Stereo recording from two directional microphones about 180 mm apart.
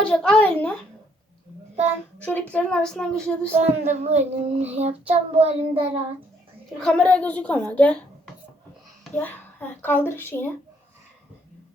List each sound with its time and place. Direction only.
0.0 s a child's voice: 5° left (ahead or behind)
2.1 s speech: 10° left (ahead or behind)
3.5 s child singing: 40° right (ahead or behind)
6.7 s a child's voice: 5° left (ahead or behind)
9.1 s a child's voice: 10° left (ahead or behind)